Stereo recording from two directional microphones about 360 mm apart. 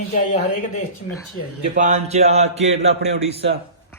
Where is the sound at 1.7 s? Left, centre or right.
Centre.